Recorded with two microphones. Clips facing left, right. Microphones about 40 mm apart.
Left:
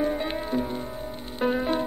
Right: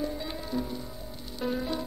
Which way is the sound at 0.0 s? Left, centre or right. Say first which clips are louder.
Left 7 dB; left.